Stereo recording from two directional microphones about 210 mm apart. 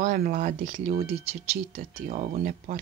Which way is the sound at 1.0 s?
30° right (ahead or behind).